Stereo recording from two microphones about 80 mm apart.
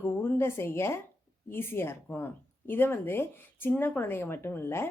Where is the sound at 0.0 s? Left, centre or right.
Left.